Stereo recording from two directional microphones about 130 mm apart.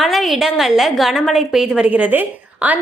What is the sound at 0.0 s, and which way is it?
A woman's voice, centre (ahead or behind).